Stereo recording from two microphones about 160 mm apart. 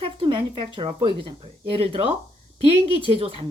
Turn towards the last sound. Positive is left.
turn(degrees=-35)  # may be behind; listen again after turning